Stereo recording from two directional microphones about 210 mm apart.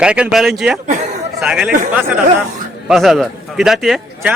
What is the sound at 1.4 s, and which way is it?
Speech, 5° right (ahead or behind).